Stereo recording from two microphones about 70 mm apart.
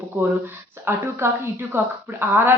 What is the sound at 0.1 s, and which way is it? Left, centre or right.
A woman's voice, right.